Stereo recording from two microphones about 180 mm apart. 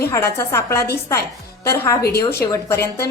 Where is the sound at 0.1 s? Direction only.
15° left (ahead or behind).